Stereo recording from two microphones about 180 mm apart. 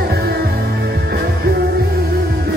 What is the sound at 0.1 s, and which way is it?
Music, 65° right (ahead or behind).